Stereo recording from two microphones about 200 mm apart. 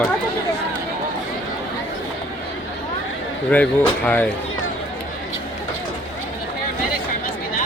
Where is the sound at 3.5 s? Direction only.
5° left (ahead or behind).